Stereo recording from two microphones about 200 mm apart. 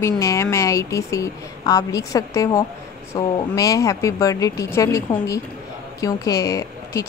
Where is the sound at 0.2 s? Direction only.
15° left (ahead or behind).